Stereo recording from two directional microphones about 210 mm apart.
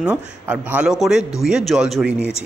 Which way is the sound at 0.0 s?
5° right (ahead or behind).